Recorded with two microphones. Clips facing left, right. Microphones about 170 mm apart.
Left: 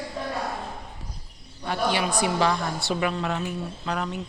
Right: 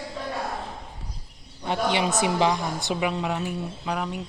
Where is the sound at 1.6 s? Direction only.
20° right (ahead or behind).